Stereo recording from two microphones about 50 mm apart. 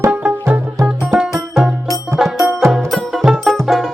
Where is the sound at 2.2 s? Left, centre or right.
Centre.